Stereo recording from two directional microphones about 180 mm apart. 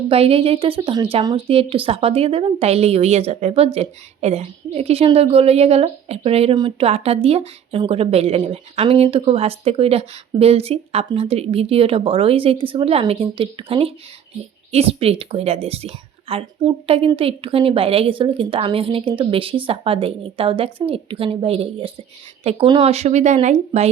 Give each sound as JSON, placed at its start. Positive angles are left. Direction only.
{"t": 0.1, "sound": "a woman's voice", "side_deg": -30}